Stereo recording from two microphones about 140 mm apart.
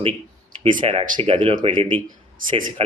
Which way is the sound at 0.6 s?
40° right (ahead or behind).